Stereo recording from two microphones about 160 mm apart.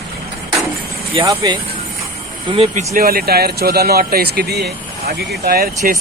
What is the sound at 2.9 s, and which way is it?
Speech, 70° right (ahead or behind).